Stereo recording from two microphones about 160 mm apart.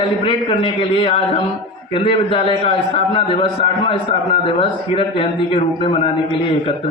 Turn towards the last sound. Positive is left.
turn(degrees=35)  # may be behind; listen again after turning